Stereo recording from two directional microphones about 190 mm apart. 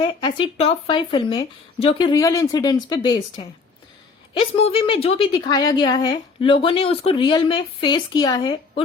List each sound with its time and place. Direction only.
0.0 s a woman's voice: 25° left (ahead or behind)
4.4 s a woman's voice: 30° left (ahead or behind)